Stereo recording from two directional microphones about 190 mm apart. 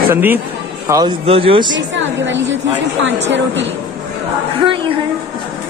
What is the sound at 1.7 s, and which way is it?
A woman's voice, 75° right (ahead or behind).